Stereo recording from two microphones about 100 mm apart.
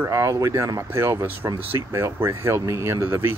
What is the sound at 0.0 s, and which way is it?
Speech, 30° right (ahead or behind).